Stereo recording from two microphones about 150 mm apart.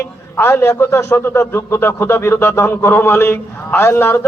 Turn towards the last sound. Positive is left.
turn(degrees=15)  # may be behind; listen again after turning